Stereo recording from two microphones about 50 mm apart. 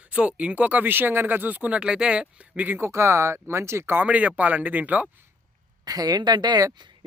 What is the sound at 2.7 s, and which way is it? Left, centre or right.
Speech, right.